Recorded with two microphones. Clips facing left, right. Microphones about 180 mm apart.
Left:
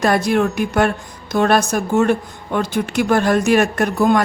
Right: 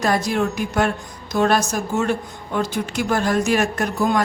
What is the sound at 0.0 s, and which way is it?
A woman's voice, 60° left (ahead or behind).